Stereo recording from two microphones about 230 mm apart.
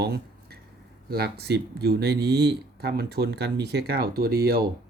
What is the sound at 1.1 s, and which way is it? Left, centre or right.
Speech, right.